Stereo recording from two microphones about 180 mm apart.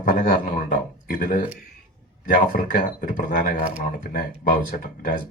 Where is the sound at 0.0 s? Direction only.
50° left (ahead or behind).